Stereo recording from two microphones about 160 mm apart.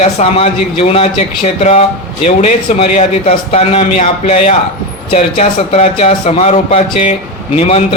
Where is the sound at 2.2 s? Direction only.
45° left (ahead or behind).